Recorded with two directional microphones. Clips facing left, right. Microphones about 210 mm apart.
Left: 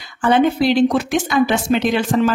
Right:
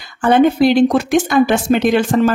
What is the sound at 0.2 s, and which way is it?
Speech, 50° right (ahead or behind).